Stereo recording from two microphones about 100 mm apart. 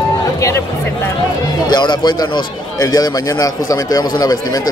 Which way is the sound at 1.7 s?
45° left (ahead or behind).